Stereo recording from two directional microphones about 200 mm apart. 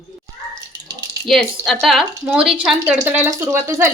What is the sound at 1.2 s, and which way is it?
A woman's voice, centre (ahead or behind).